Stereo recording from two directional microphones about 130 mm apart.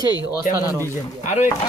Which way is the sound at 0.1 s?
30° left (ahead or behind).